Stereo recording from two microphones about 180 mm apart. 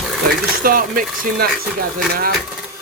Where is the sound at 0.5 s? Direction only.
50° right (ahead or behind).